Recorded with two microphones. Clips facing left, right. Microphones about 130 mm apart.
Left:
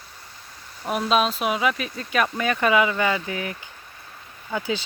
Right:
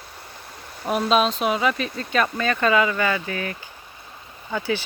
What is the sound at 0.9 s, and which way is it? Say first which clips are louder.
Speech: right 2 dB; centre (ahead or behind).